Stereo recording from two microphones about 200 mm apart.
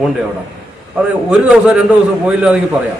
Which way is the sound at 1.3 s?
5° right (ahead or behind).